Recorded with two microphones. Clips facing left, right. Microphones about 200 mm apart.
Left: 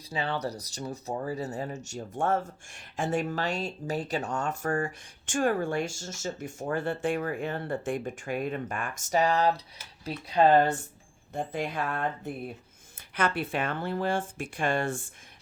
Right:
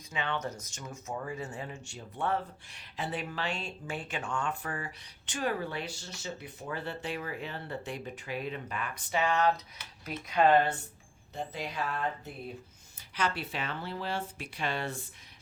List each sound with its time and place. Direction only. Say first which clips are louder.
0.1 s speech: left 4 dB; 35° left (ahead or behind)
11.3 s speech: left 5 dB; 50° left (ahead or behind)